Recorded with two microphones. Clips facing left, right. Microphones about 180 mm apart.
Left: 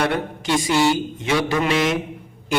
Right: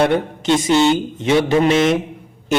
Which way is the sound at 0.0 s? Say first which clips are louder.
Right 6 dB; 20° right (ahead or behind).